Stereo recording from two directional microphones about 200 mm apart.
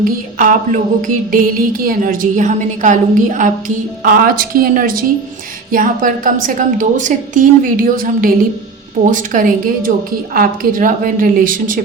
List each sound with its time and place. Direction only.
0.0 s music: 45° right (ahead or behind)